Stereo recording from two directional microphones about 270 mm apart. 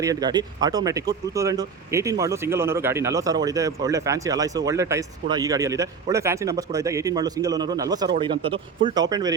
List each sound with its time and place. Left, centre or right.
0.0 s speech: centre